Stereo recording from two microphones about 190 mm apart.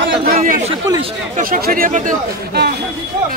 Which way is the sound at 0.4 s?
35° right (ahead or behind).